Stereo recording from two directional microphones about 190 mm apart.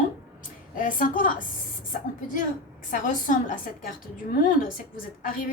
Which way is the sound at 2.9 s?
45° left (ahead or behind).